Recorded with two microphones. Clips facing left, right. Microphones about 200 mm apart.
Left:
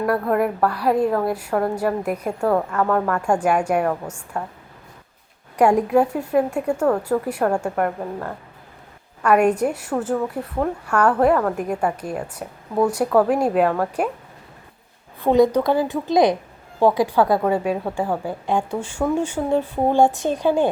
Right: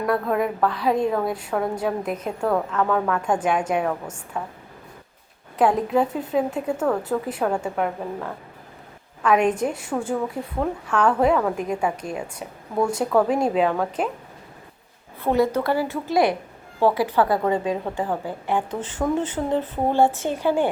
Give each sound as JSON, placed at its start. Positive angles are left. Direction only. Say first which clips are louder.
{"t": 0.0, "sound": "a woman's voice", "louder": "left 2 dB", "side_deg": 5}
{"t": 5.5, "sound": "a woman's voice", "louder": "left 3 dB", "side_deg": 10}
{"t": 15.2, "sound": "a woman's voice", "louder": "left 5 dB", "side_deg": 15}